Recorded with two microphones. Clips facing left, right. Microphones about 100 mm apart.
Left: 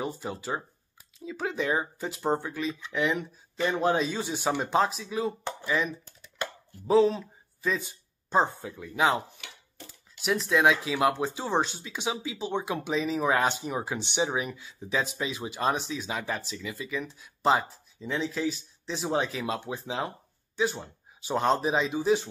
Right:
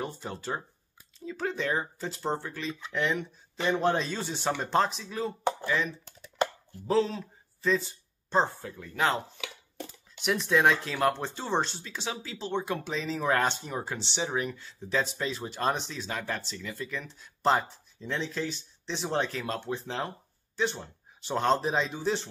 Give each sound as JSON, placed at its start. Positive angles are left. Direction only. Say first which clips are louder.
{"t": 0.0, "sound": "speech", "louder": "left 2 dB", "side_deg": 5}
{"t": 10.2, "sound": "speech", "louder": "left 1 dB", "side_deg": 0}